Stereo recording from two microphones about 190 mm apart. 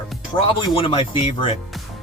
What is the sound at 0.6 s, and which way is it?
Speech, 30° left (ahead or behind).